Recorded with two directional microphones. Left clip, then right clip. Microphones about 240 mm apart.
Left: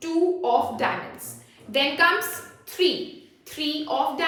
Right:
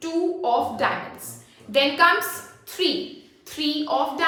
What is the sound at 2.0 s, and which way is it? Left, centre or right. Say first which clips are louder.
A woman's voice: right 2 dB; centre.